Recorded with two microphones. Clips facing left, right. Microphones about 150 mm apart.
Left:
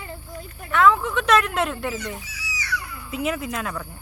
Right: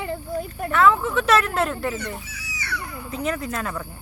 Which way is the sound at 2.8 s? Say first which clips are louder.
Even; 35° right (ahead or behind).